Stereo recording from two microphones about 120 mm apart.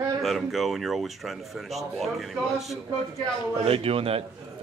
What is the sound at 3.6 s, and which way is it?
Speech, 55° right (ahead or behind).